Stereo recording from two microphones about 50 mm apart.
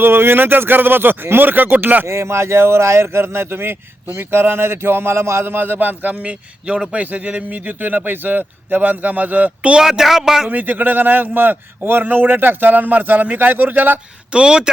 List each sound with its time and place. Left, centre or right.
0.0 s speech: right
2.0 s speech: right
6.7 s a man's voice: right
7.0 s a man's voice: right
9.7 s speech: centre
10.5 s a man's voice: right
14.3 s speech: centre